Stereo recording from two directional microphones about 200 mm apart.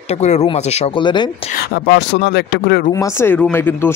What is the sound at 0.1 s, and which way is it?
Speech, 35° left (ahead or behind).